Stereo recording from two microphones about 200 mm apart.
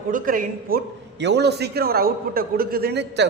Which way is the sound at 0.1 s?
45° right (ahead or behind).